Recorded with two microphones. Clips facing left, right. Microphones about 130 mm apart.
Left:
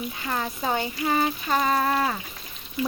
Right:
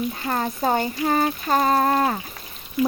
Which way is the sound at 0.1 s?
40° right (ahead or behind).